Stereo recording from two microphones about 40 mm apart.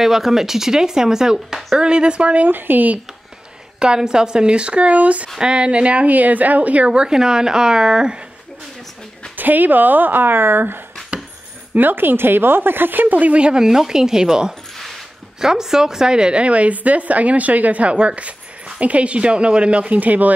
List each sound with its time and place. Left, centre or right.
0.0 s speech: centre; by 2.4 s right
2.4 s speech: right
3.8 s speech: centre; by 5.3 s right
5.4 s speech: right
6.0 s speech: right
6.9 s speech: centre
9.4 s a woman's voice: right
13.4 s a woman's voice: right